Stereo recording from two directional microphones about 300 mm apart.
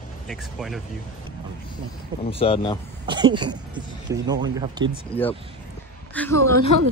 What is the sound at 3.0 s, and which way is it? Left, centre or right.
Speech, centre.